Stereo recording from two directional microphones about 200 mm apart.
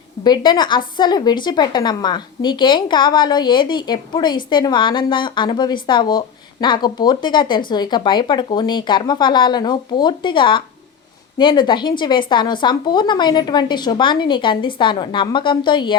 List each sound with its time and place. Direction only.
0.3 s a woman's voice: 20° left (ahead or behind)